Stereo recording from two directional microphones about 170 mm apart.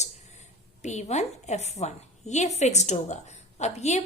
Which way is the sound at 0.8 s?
45° left (ahead or behind).